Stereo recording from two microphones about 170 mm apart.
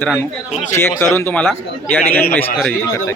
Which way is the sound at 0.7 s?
15° left (ahead or behind).